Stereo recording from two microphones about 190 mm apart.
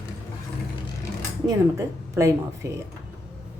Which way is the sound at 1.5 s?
15° right (ahead or behind).